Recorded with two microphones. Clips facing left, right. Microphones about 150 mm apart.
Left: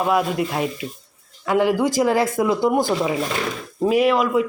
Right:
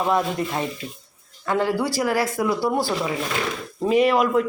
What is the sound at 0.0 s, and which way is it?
A man's voice, 10° left (ahead or behind).